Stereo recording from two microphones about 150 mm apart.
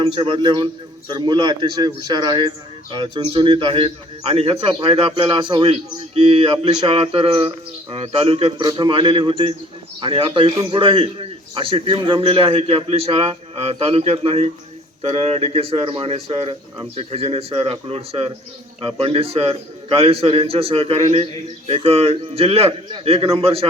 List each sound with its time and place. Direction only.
0.0 s a man's voice: 35° right (ahead or behind)
8.6 s a man's voice: 30° right (ahead or behind)